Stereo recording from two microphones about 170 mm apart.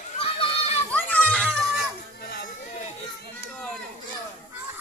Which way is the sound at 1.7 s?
70° left (ahead or behind).